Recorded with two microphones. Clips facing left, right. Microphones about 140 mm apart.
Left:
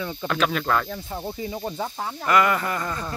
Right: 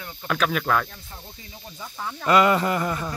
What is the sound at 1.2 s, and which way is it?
Speech, 90° left.